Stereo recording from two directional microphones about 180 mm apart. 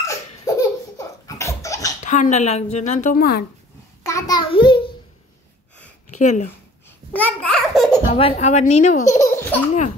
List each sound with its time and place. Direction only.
0.0 s laughter: 15° left (ahead or behind)
2.0 s a woman's voice: 40° left (ahead or behind)
4.0 s a sound: 20° left (ahead or behind)
6.0 s speech: 40° left (ahead or behind)
7.1 s a sound: 10° left (ahead or behind)
8.1 s a woman's voice: 35° left (ahead or behind)
9.1 s laughter: 15° left (ahead or behind)